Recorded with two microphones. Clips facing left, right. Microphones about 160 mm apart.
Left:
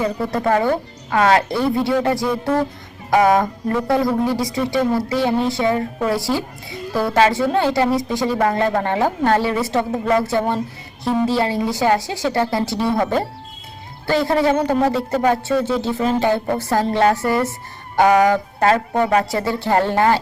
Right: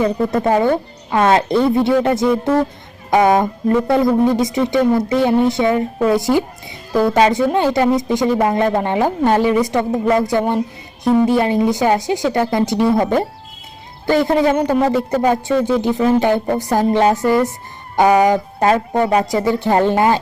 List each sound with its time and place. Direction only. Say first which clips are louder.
0.0 s speech: right 4 dB; 20° right (ahead or behind)